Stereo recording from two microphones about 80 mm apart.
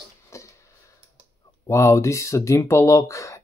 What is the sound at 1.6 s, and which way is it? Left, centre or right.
Speech, left.